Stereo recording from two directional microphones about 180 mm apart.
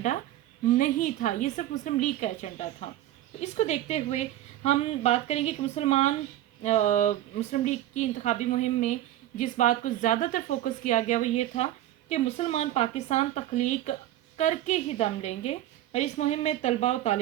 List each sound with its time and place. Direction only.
0.8 s a woman's voice: 45° left (ahead or behind)